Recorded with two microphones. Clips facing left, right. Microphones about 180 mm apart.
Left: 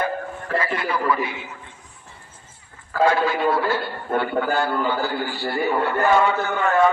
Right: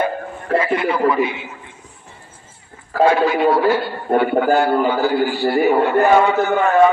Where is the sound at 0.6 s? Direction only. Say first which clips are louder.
Right 8 dB; 20° right (ahead or behind).